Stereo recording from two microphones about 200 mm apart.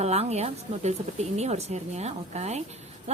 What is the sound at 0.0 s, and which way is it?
A woman's voice, 30° right (ahead or behind).